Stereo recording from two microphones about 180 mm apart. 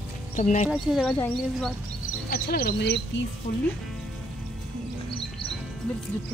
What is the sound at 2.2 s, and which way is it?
Speech, 55° left (ahead or behind).